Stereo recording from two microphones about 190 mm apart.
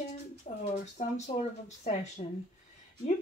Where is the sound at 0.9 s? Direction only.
35° left (ahead or behind).